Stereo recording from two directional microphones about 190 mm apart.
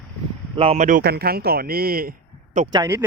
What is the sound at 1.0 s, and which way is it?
Speech, 55° right (ahead or behind).